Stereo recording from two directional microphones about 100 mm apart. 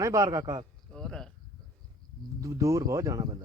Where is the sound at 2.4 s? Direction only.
35° right (ahead or behind).